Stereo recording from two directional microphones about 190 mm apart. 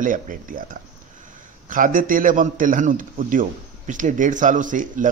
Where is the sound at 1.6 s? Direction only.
45° right (ahead or behind).